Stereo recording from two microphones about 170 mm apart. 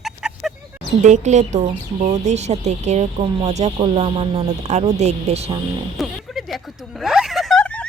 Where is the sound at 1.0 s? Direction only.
45° right (ahead or behind).